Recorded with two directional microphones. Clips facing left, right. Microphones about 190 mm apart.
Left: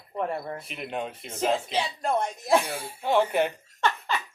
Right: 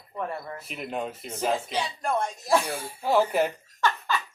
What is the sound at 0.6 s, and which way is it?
Speech, centre (ahead or behind).